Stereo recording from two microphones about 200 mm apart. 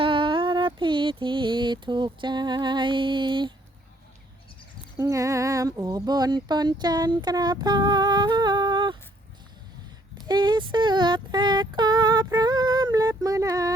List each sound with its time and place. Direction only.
0.0 s mantra: 25° right (ahead or behind)
4.9 s speech: 15° right (ahead or behind)
10.2 s speech: 20° right (ahead or behind)